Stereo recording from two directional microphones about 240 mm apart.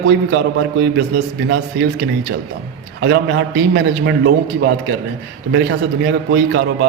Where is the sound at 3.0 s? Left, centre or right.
Right.